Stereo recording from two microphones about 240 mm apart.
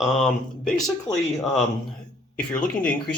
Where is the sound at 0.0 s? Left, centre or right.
Centre.